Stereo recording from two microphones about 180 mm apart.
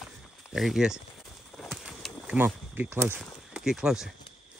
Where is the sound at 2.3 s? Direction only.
10° right (ahead or behind).